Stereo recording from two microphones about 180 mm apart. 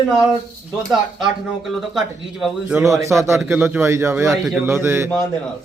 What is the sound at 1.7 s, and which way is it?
Speech, centre (ahead or behind).